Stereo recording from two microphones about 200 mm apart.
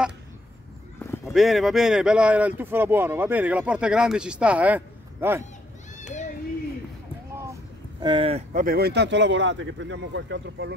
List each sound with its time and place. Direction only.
1.3 s speech: centre (ahead or behind)
8.0 s speech: 25° right (ahead or behind)
8.6 s speech: 50° right (ahead or behind)